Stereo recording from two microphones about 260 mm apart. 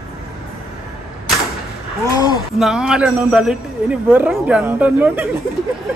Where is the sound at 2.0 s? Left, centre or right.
Centre.